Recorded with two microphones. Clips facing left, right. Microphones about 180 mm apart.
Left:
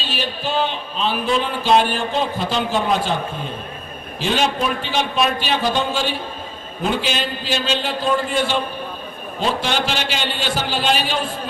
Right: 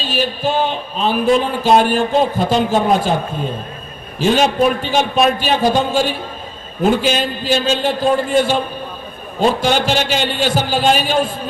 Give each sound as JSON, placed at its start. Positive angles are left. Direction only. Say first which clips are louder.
{"t": 0.0, "sound": "speech", "louder": "right 6 dB", "side_deg": -45}
{"t": 4.2, "sound": "speech", "louder": "right 7 dB", "side_deg": -45}